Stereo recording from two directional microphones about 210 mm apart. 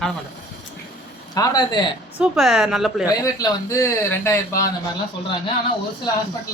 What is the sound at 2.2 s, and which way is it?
Speech, 5° right (ahead or behind).